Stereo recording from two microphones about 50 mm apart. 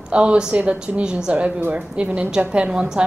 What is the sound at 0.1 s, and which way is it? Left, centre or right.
A woman's voice, right.